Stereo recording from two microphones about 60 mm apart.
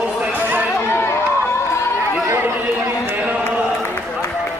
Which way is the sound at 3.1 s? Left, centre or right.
Right.